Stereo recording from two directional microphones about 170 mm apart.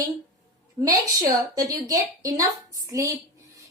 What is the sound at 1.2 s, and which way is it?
A woman's voice, 20° right (ahead or behind).